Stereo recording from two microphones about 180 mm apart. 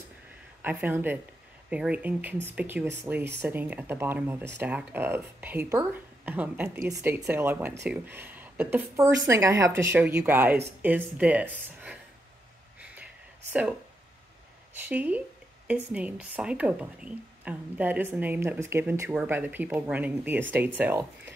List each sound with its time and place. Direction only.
0.6 s speech: 10° right (ahead or behind)
13.5 s speech: 5° right (ahead or behind)
14.9 s speech: 10° right (ahead or behind)